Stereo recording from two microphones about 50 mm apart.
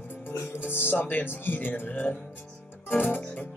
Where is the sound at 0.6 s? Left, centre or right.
Left.